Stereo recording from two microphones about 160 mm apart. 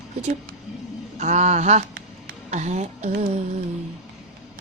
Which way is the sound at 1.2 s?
45° right (ahead or behind).